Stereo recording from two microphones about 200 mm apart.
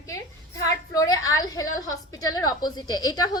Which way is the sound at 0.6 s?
15° left (ahead or behind).